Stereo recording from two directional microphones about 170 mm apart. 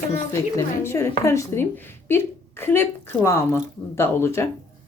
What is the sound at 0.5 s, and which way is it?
Speech, 15° left (ahead or behind).